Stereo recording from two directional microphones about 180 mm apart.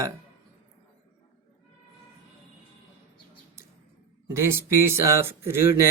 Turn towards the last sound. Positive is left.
turn(degrees=-15)  # may be behind; listen again after turning